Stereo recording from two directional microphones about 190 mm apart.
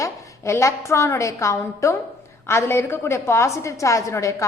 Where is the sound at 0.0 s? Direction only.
15° left (ahead or behind).